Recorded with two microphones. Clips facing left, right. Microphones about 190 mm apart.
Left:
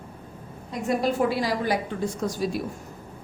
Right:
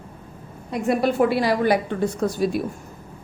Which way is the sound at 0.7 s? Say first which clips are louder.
Right 4 dB; 65° right (ahead or behind).